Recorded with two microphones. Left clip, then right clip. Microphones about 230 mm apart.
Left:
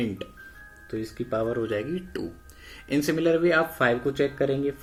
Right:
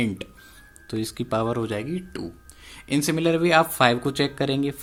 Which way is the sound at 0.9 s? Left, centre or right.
Right.